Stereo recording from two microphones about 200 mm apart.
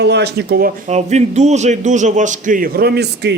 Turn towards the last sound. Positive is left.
turn(degrees=-55)  # may be behind; listen again after turning